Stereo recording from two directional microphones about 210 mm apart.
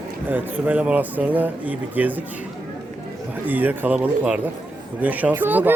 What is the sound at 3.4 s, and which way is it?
Speech, 10° right (ahead or behind).